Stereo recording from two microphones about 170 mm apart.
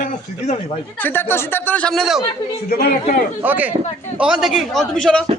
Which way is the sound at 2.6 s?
60° left (ahead or behind).